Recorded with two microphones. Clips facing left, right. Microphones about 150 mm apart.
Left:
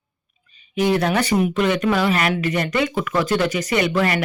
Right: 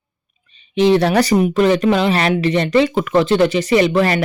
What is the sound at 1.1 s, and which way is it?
Speech, 40° right (ahead or behind).